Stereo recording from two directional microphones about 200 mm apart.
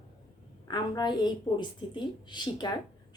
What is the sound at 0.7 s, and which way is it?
A woman's voice, 20° left (ahead or behind).